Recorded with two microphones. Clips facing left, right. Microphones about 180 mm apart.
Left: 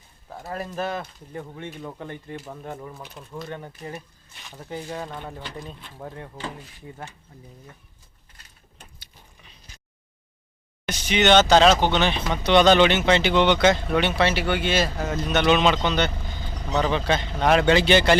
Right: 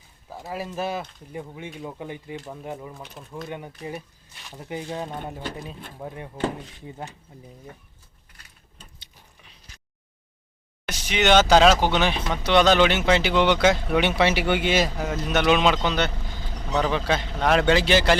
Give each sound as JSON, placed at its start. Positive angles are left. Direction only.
{"t": 0.3, "sound": "speech", "side_deg": -5}
{"t": 4.5, "sound": "speech", "side_deg": -15}
{"t": 10.8, "sound": "speech", "side_deg": -5}